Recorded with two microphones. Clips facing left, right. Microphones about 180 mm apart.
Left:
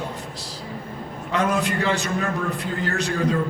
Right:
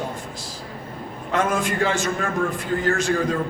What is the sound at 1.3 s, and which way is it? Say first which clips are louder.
A man's voice: even; 50° right (ahead or behind).